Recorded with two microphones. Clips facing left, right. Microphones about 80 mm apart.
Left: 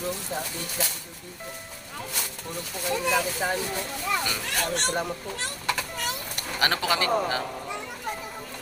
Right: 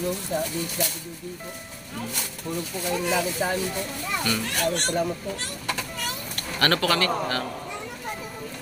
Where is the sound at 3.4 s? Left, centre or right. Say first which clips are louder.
Right 2 dB; centre.